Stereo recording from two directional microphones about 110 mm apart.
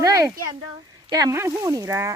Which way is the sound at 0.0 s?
30° right (ahead or behind).